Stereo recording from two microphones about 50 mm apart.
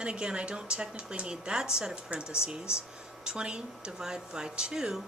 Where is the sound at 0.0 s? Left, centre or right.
Centre.